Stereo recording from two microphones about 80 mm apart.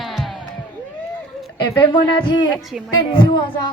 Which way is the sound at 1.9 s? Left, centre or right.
Left.